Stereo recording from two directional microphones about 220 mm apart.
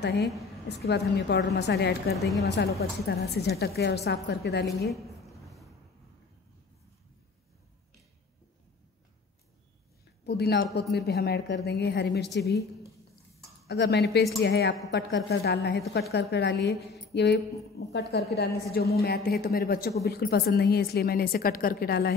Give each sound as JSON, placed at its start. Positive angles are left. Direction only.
{"t": 0.0, "sound": "a woman's voice", "side_deg": 50}
{"t": 2.1, "sound": "a woman's voice", "side_deg": 0}
{"t": 2.4, "sound": "a woman's voice", "side_deg": 50}
{"t": 4.8, "sound": "a sound", "side_deg": 0}
{"t": 10.2, "sound": "a woman's voice", "side_deg": 50}
{"t": 13.7, "sound": "a woman's voice", "side_deg": 50}